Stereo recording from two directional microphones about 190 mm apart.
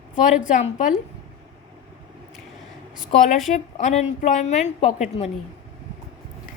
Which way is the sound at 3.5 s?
40° left (ahead or behind).